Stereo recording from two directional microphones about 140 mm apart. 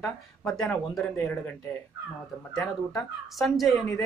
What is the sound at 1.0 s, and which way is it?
Speech, 15° left (ahead or behind).